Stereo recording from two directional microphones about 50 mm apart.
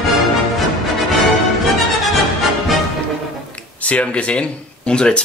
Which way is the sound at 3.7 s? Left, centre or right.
Left.